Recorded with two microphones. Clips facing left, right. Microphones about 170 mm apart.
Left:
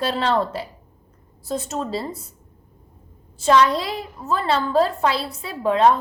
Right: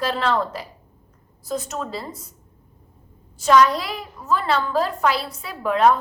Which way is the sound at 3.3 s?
30° left (ahead or behind).